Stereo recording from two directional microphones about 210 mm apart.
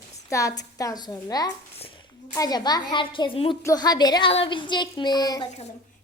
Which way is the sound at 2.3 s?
15° left (ahead or behind).